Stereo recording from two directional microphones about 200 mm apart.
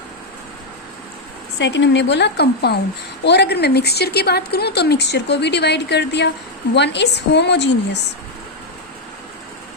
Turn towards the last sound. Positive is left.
turn(degrees=60)  # may be behind; listen again after turning